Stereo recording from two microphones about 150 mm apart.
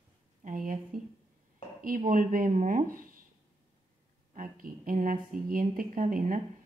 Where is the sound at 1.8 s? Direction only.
65° right (ahead or behind).